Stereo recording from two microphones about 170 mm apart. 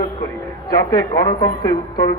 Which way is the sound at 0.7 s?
20° left (ahead or behind).